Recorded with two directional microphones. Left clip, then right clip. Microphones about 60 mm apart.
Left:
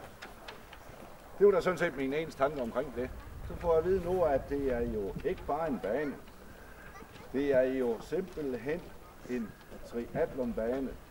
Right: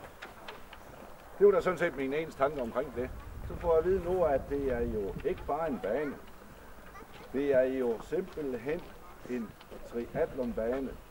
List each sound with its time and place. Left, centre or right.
1.4 s speech: left
7.3 s speech: left